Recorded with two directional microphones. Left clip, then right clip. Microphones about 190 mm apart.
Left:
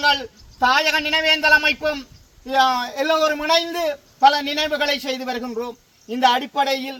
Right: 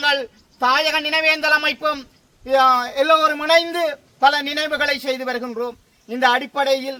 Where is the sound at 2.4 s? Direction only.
15° right (ahead or behind).